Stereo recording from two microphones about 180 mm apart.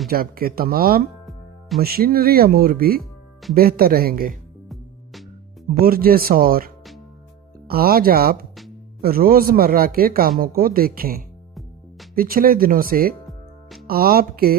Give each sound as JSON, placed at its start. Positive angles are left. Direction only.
{"t": 0.1, "sound": "a man's voice", "side_deg": -55}
{"t": 5.7, "sound": "a man's voice", "side_deg": -55}
{"t": 7.7, "sound": "a man's voice", "side_deg": -55}
{"t": 13.2, "sound": "music", "side_deg": 0}
{"t": 13.8, "sound": "a man's voice", "side_deg": -55}